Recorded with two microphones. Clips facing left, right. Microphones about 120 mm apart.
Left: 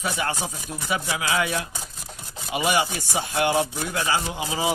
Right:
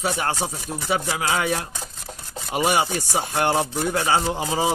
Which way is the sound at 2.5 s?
40° right (ahead or behind).